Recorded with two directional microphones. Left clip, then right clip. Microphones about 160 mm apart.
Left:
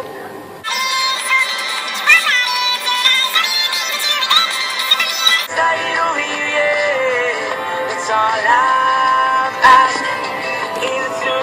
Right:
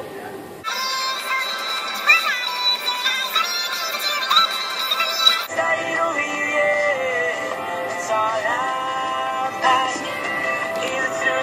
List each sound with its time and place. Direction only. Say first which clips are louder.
1.0 s music: left 8 dB; 20° left (ahead or behind)
5.6 s synthetic singing: left 5 dB; 45° left (ahead or behind)
6.5 s music: left 4 dB; 45° left (ahead or behind)